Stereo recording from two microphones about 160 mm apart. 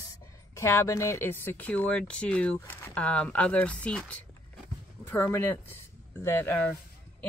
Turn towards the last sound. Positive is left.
turn(degrees=10)  # may be behind; listen again after turning